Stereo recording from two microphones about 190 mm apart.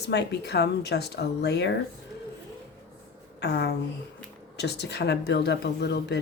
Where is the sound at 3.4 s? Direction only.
60° left (ahead or behind).